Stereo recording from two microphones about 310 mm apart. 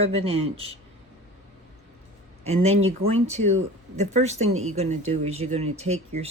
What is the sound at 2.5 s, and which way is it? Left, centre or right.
A woman's voice, centre.